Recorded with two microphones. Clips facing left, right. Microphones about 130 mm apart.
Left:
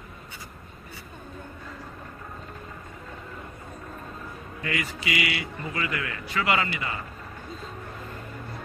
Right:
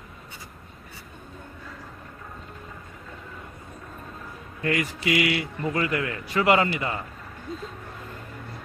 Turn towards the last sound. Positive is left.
turn(degrees=0)  # may be behind; listen again after turning